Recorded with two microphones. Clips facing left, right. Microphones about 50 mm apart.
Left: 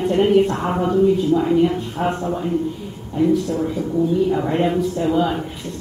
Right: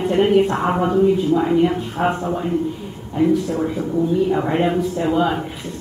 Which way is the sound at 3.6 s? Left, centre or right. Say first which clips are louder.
Even; centre.